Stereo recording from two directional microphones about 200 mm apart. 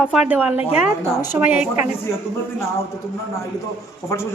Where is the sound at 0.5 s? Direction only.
30° left (ahead or behind).